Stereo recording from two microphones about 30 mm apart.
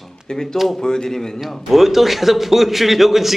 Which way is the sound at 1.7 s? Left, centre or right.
Centre.